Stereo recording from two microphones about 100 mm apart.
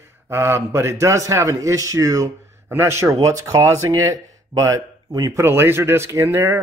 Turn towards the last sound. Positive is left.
turn(degrees=-25)  # may be behind; listen again after turning